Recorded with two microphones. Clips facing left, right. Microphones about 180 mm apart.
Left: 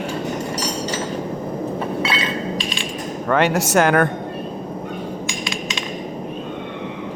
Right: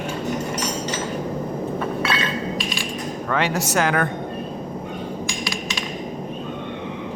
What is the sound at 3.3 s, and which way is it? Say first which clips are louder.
Speech: left 5 dB; 55° left (ahead or behind).